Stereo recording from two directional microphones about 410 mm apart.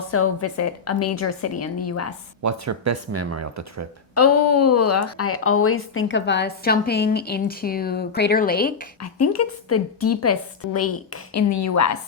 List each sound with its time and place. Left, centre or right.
0.1 s a woman's voice: left
2.4 s speech: right
4.1 s a woman's voice: left
9.0 s a woman's voice: left